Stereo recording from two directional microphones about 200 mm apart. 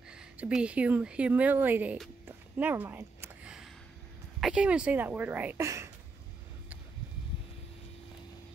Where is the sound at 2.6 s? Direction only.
10° right (ahead or behind).